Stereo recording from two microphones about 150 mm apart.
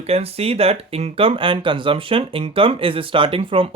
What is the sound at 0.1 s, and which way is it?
Speech, 40° right (ahead or behind).